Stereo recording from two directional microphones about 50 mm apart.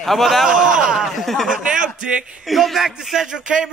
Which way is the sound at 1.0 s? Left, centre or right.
Centre.